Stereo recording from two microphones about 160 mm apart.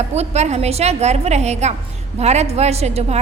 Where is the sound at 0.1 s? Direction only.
45° right (ahead or behind).